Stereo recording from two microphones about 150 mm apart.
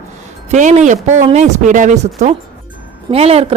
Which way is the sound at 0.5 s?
50° right (ahead or behind).